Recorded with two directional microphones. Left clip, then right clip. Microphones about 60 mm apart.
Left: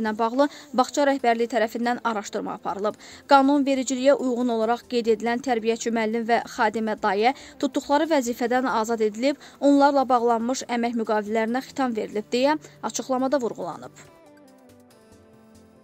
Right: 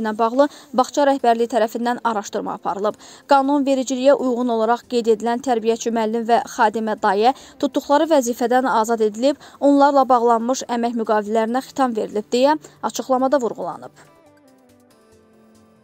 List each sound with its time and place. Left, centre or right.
0.0 s speech: right
7.5 s speech: right
10.4 s speech: right
12.8 s speech: right